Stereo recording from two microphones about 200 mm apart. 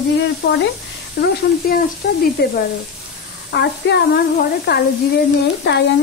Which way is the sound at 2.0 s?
50° left (ahead or behind).